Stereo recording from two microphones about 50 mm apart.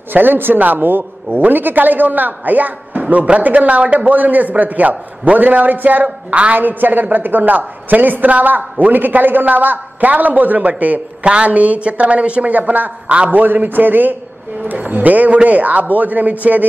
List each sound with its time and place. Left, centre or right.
0.1 s a man's voice: right
6.0 s a woman's voice: right
6.5 s a man's voice: right